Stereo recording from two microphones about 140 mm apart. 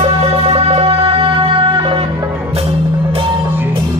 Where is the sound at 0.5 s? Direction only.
45° right (ahead or behind).